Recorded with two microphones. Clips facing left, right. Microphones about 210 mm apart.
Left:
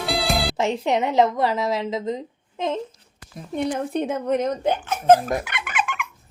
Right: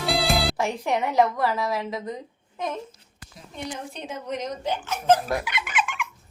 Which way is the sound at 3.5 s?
55° left (ahead or behind).